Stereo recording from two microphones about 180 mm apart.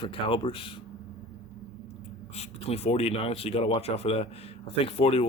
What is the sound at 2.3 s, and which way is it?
Speech, 35° left (ahead or behind).